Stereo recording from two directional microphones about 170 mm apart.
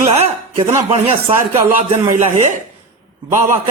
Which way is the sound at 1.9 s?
45° right (ahead or behind).